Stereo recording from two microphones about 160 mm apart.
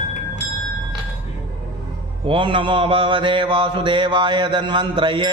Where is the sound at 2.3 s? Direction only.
30° right (ahead or behind).